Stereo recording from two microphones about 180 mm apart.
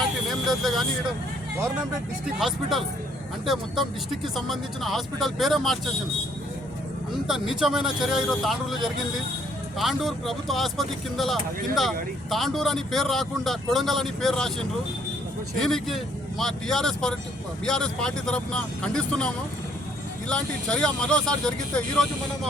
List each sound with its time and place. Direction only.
0.0 s vehicle: centre (ahead or behind)
2.4 s speech: centre (ahead or behind)
7.3 s speech: centre (ahead or behind)
15.5 s speech: centre (ahead or behind)